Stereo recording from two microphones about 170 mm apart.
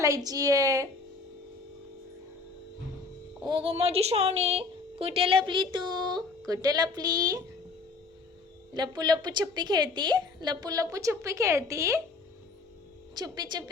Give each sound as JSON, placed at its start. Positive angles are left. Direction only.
{"t": 0.0, "sound": "a woman's voice", "side_deg": -20}
{"t": 3.4, "sound": "a woman's voice", "side_deg": -30}
{"t": 8.7, "sound": "a woman's voice", "side_deg": -25}
{"t": 13.1, "sound": "a woman's voice", "side_deg": -25}